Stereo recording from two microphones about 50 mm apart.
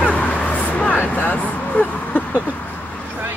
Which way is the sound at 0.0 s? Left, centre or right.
Left.